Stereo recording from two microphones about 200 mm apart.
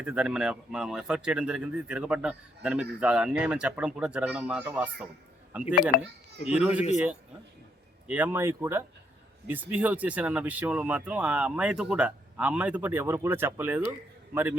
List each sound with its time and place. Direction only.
0.0 s a man's voice: 5° right (ahead or behind)
5.9 s speech: 50° left (ahead or behind)
6.5 s a man's voice: 5° right (ahead or behind)
8.0 s speech: 5° right (ahead or behind)